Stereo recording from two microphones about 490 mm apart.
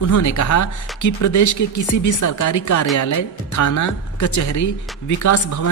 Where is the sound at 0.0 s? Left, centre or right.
Left.